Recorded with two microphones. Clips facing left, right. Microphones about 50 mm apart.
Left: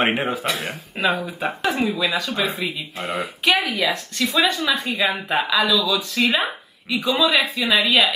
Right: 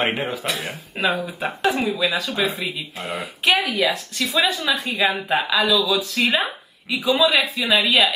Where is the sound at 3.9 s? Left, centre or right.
Centre.